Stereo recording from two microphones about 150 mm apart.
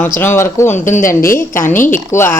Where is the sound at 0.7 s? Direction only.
60° left (ahead or behind).